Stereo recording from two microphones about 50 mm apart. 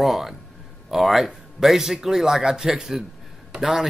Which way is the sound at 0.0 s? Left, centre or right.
Centre.